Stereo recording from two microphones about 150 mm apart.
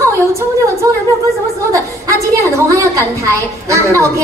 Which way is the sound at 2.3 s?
20° right (ahead or behind).